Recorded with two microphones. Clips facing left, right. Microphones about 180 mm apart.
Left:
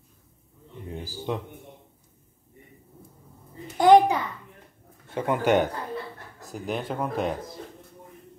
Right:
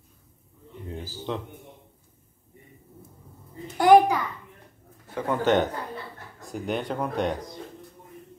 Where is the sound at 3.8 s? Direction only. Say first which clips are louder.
Even; 20° left (ahead or behind).